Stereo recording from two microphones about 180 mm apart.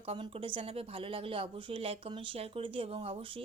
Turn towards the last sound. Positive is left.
turn(degrees=-30)  # may be behind; listen again after turning